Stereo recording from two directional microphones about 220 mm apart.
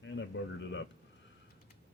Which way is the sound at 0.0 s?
55° left (ahead or behind).